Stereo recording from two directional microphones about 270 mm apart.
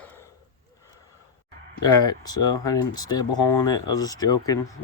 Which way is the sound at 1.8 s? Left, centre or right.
Centre.